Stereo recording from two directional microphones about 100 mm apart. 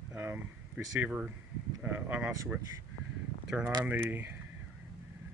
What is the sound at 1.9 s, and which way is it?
Speech, 15° right (ahead or behind).